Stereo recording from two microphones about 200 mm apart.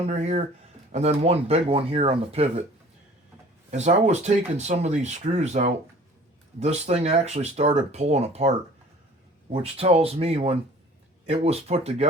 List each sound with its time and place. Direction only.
0.1 s speech: 35° right (ahead or behind)
3.7 s speech: 35° right (ahead or behind)